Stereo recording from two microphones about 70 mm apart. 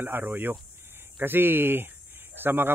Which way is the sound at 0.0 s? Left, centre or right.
Right.